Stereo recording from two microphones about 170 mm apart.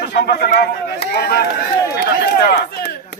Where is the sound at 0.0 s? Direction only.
80° left.